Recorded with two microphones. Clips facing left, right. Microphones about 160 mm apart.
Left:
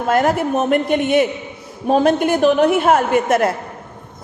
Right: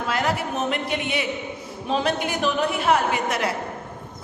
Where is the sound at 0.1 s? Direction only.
50° left (ahead or behind).